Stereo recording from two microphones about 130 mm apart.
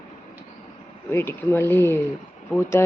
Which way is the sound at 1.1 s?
20° left (ahead or behind).